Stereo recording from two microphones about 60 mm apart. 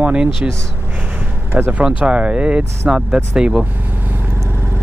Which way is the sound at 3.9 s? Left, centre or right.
Right.